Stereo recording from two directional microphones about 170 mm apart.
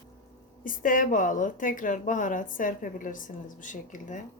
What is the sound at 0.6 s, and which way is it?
A woman's voice, 50° left (ahead or behind).